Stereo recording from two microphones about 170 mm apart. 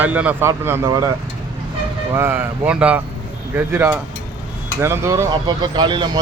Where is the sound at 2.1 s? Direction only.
15° right (ahead or behind).